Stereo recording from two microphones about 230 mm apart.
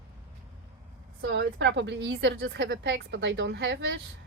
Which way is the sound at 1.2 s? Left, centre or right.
Right.